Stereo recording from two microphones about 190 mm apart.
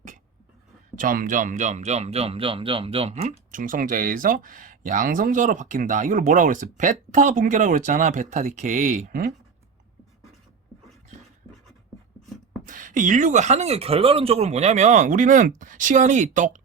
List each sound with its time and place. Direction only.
0.9 s speech: 45° right (ahead or behind)
12.6 s speech: 45° right (ahead or behind)